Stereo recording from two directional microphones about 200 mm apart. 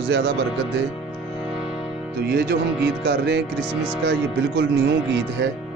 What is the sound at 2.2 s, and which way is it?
Speech, 55° right (ahead or behind).